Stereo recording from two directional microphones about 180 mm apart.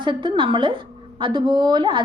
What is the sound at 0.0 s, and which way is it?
A woman's voice, 25° right (ahead or behind).